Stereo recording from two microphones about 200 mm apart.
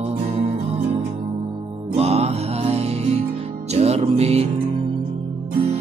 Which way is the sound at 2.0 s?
30° right (ahead or behind).